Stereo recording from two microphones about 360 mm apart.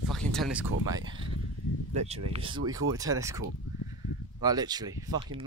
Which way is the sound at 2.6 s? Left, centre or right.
Right.